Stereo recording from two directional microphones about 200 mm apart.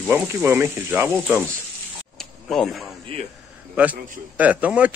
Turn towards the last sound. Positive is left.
turn(degrees=-5)  # may be behind; listen again after turning